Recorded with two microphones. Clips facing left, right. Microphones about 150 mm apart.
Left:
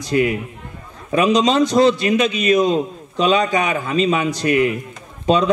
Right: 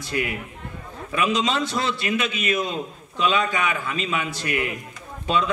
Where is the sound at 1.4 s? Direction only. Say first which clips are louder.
Left 10 dB; 40° left (ahead or behind).